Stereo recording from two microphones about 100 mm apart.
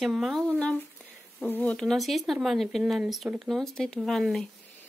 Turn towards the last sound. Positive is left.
turn(degrees=5)  # may be behind; listen again after turning